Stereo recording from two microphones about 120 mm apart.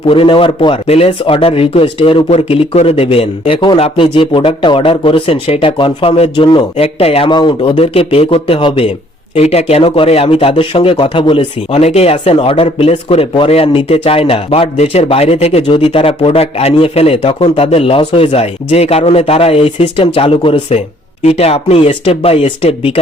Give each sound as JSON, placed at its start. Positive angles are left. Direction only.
{"t": 0.1, "sound": "speech", "side_deg": 50}
{"t": 6.3, "sound": "speech", "side_deg": 45}
{"t": 7.3, "sound": "speech", "side_deg": 40}
{"t": 11.7, "sound": "speech", "side_deg": 60}
{"t": 15.6, "sound": "speech", "side_deg": 50}